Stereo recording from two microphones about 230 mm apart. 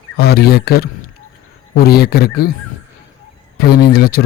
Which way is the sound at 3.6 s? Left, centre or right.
Left.